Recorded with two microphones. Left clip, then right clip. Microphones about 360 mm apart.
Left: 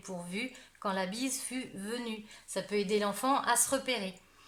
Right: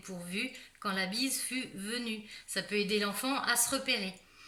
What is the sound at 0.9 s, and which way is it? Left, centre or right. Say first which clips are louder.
A woman's voice: right 1 dB; centre.